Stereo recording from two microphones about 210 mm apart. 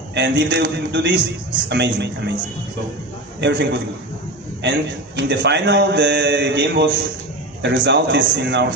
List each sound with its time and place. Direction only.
0.1 s a man's voice: 55° right (ahead or behind)
3.3 s a man's voice: 55° right (ahead or behind)